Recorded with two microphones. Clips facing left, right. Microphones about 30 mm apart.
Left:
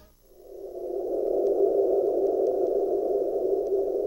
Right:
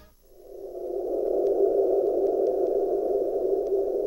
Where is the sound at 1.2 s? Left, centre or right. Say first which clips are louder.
Even; centre.